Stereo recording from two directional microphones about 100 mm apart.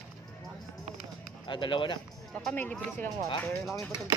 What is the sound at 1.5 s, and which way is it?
Speech, 55° left (ahead or behind).